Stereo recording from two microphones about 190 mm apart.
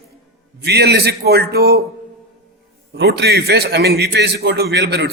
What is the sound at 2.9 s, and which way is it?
A man's voice, 60° right (ahead or behind).